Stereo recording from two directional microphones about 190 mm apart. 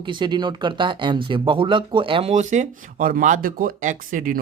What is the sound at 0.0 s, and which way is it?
Speech, 25° right (ahead or behind).